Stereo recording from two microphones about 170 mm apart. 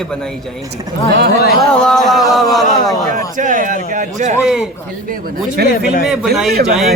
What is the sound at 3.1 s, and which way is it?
A man's voice, 50° right (ahead or behind).